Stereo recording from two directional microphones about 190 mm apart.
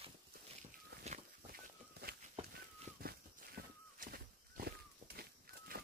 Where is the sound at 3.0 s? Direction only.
55° right (ahead or behind).